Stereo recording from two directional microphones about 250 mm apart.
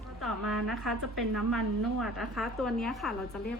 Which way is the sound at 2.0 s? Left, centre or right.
Centre.